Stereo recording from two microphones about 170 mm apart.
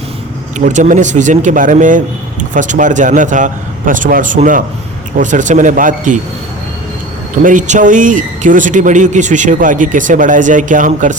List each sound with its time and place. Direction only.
0.6 s speech: 45° right (ahead or behind)
7.4 s speech: 50° right (ahead or behind)